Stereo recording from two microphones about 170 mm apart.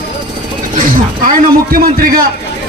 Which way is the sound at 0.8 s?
55° right (ahead or behind).